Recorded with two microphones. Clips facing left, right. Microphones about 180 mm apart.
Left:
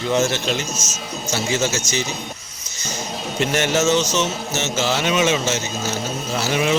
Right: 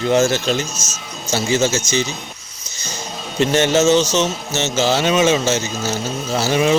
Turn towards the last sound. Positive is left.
turn(degrees=-30)  # may be behind; listen again after turning